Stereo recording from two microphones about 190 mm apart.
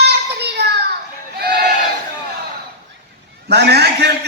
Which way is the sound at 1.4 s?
55° right (ahead or behind).